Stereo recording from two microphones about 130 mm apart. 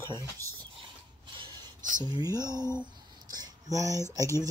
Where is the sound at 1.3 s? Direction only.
40° right (ahead or behind).